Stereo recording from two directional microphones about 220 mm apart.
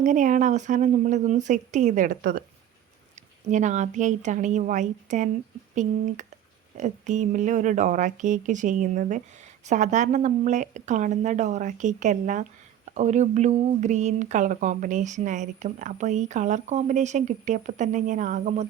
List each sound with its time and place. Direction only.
0.0 s speech: 35° right (ahead or behind)
3.4 s speech: 35° right (ahead or behind)